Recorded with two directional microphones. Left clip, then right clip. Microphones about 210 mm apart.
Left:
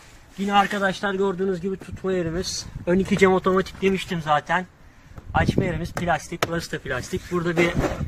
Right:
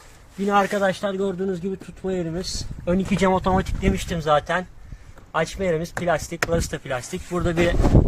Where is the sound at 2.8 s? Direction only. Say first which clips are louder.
Left 3 dB; 15° right (ahead or behind).